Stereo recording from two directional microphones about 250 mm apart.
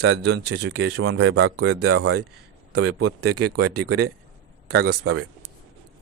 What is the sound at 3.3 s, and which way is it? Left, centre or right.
Speech, right.